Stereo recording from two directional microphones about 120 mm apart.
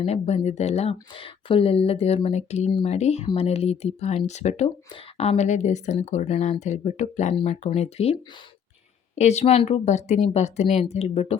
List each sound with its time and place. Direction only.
0.0 s speech: 60° left (ahead or behind); by 6.2 s 80° left
6.2 s speech: 65° left (ahead or behind)
9.1 s speech: 70° left (ahead or behind)